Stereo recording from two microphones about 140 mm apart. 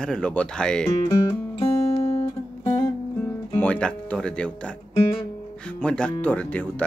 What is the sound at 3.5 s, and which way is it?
Speech, 10° left (ahead or behind).